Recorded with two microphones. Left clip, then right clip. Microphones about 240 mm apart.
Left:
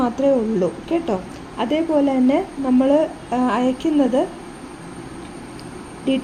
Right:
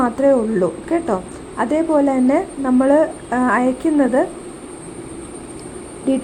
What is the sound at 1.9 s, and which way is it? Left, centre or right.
A woman's voice, centre.